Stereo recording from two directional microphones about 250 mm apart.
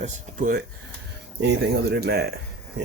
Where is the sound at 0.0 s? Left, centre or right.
Right.